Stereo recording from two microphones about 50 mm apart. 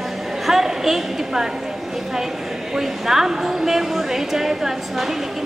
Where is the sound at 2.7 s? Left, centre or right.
Centre.